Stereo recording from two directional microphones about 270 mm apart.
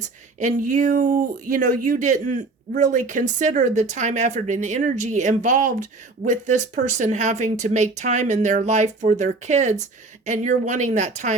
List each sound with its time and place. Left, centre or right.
0.3 s speech: right